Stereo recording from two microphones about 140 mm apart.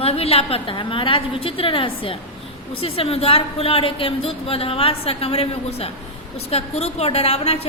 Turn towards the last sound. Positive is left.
turn(degrees=45)  # may be behind; listen again after turning